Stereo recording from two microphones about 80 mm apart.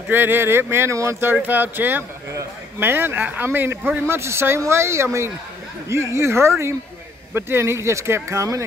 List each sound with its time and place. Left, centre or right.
0.1 s speech: right
1.3 s speech: right